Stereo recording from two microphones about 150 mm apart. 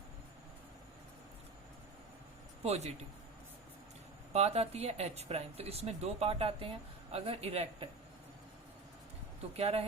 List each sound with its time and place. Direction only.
2.6 s speech: 45° right (ahead or behind)
4.3 s speech: 45° right (ahead or behind)
9.6 s speech: 45° right (ahead or behind)